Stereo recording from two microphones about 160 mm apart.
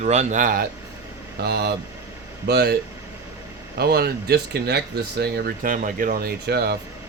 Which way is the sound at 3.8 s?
75° right (ahead or behind).